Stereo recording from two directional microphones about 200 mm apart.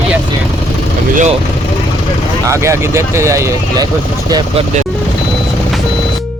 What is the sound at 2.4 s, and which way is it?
Speech, 15° right (ahead or behind).